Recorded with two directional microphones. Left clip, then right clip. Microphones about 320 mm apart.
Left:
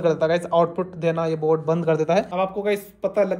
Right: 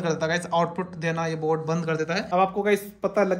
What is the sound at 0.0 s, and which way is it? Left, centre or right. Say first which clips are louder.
A man's voice: left 6 dB; centre.